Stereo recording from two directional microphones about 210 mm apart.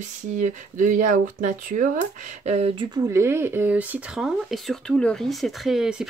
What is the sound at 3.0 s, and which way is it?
Speech, 15° right (ahead or behind).